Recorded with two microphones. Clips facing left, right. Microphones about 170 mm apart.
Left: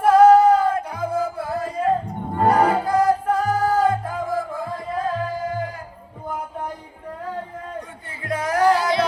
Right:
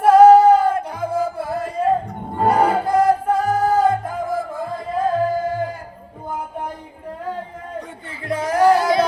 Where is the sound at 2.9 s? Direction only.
25° right (ahead or behind).